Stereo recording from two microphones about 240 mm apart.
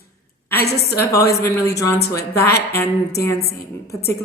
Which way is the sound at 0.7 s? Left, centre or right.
Left.